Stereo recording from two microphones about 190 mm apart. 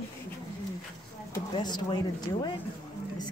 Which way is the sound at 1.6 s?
20° left (ahead or behind).